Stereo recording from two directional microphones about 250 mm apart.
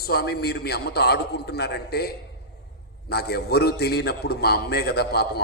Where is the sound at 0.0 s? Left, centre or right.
Left.